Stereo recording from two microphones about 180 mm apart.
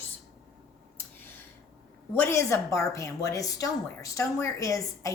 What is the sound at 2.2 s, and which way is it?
A woman's voice, 15° left (ahead or behind).